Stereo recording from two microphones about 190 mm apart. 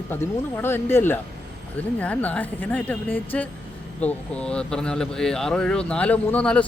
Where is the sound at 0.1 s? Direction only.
10° left (ahead or behind).